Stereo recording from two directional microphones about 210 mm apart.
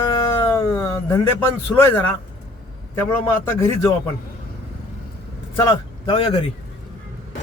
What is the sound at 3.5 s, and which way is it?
Speech, 15° left (ahead or behind).